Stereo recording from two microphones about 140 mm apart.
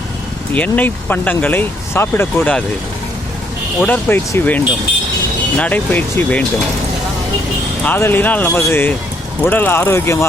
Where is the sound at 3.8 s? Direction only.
15° left (ahead or behind).